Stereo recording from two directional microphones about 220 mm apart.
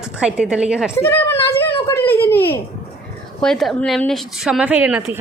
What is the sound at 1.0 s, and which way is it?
A child's voice, 10° left (ahead or behind).